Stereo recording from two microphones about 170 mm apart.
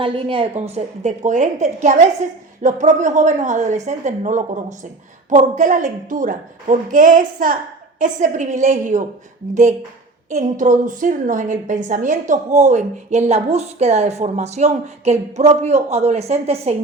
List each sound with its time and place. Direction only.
0.0 s a woman's voice: 30° right (ahead or behind); by 9.0 s 45° right (ahead or behind)
10.2 s a woman's voice: 45° right (ahead or behind)